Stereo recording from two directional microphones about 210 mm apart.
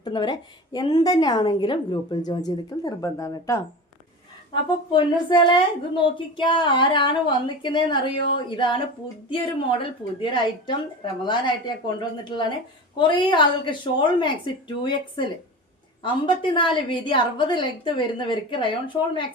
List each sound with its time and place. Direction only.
0.0 s a woman's voice: 20° left (ahead or behind)
4.9 s a woman's voice: 25° left (ahead or behind)